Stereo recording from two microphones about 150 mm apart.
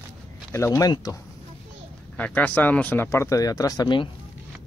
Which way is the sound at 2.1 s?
10° left (ahead or behind).